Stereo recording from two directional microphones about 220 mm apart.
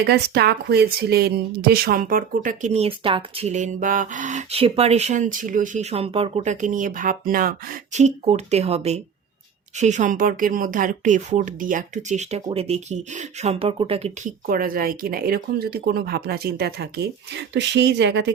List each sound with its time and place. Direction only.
0.0 s a woman's voice: 50° right (ahead or behind); by 14.3 s 30° right (ahead or behind)
14.4 s speech: 40° right (ahead or behind)